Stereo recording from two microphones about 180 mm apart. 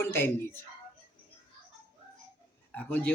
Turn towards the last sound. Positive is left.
turn(degrees=10)  # may be behind; listen again after turning